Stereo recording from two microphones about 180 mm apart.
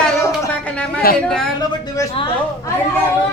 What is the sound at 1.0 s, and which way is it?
Speech, 55° left (ahead or behind).